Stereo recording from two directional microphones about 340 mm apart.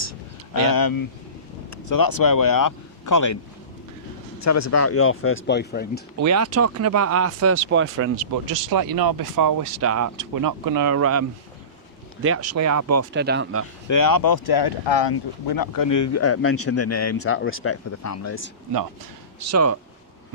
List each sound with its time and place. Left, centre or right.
0.5 s speech: left
1.7 s speech: left
4.4 s speech: left
6.1 s speech: right
8.4 s speech: right
9.7 s speech: right
10.2 s speech: right
13.1 s speech: right
13.8 s speech: left
18.0 s speech: left
19.5 s speech: right